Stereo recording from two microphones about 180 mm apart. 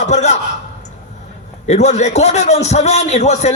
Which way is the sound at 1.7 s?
40° left (ahead or behind).